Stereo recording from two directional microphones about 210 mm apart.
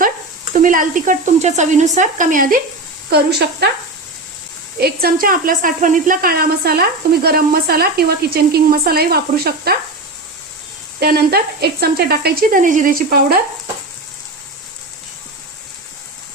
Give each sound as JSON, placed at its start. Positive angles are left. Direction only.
{"t": 0.5, "sound": "speech", "side_deg": -40}
{"t": 3.1, "sound": "speech", "side_deg": -50}
{"t": 4.8, "sound": "speech", "side_deg": -45}
{"t": 11.0, "sound": "speech", "side_deg": -45}